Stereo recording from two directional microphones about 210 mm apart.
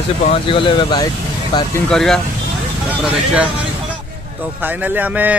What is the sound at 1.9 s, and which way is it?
Speech, centre (ahead or behind).